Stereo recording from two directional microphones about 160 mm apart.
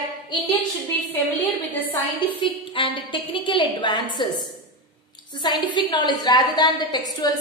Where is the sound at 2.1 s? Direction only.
35° left (ahead or behind).